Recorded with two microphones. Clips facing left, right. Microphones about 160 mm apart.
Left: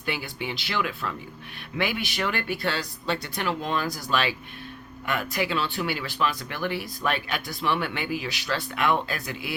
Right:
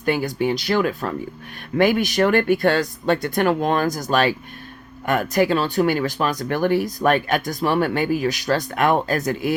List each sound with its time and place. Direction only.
0.0 s speech: 45° right (ahead or behind)